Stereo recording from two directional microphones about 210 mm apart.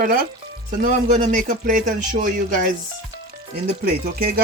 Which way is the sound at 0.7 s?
40° right (ahead or behind).